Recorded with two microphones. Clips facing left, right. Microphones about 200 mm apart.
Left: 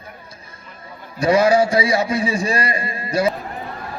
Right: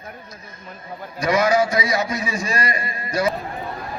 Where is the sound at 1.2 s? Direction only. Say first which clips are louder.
Left 4 dB; 30° left (ahead or behind).